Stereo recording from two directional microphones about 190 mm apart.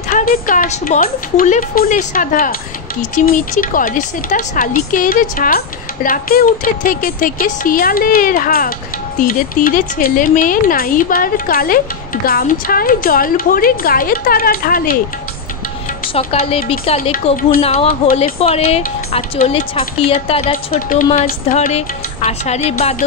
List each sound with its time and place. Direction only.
0.1 s speech: 45° left (ahead or behind)
16.1 s a woman's voice: 30° left (ahead or behind)
17.1 s speech: 50° left (ahead or behind)
17.6 s a woman's voice: 30° left (ahead or behind)
20.7 s a woman's voice: 45° left (ahead or behind)